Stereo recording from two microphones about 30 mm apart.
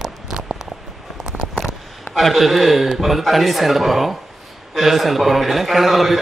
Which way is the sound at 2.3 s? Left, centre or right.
Centre.